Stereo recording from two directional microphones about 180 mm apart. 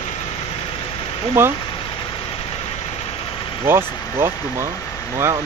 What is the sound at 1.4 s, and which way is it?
Speech, 15° right (ahead or behind).